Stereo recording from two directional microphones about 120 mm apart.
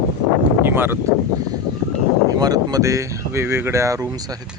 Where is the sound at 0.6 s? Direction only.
20° right (ahead or behind).